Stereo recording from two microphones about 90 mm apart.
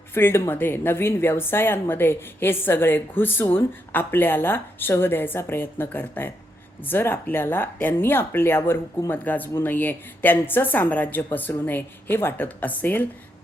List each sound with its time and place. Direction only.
0.1 s speech: 25° left (ahead or behind)